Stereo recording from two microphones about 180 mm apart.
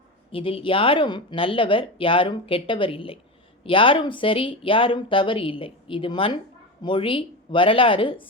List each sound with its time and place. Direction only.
0.3 s speech: 30° left (ahead or behind)